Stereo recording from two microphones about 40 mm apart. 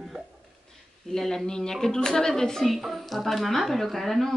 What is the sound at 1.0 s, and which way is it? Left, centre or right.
A woman's voice, centre.